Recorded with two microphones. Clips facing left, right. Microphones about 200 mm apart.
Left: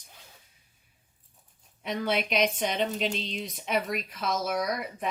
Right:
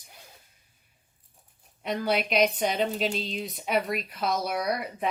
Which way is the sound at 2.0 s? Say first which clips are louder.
Right 2 dB; centre (ahead or behind).